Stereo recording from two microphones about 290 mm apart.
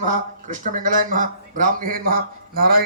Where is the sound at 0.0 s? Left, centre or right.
Right.